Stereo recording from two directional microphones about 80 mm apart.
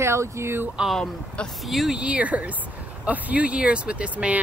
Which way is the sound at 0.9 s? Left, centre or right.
Centre.